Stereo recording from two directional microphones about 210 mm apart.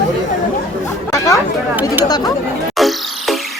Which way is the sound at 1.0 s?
15° left (ahead or behind).